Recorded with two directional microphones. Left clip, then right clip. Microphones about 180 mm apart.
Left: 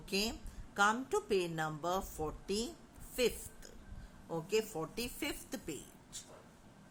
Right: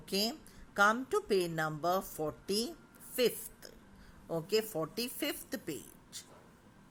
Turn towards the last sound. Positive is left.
turn(degrees=-25)  # may be behind; listen again after turning